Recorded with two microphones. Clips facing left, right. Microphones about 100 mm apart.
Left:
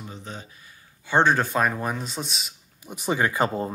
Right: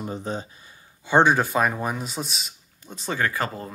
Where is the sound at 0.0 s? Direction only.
40° right (ahead or behind).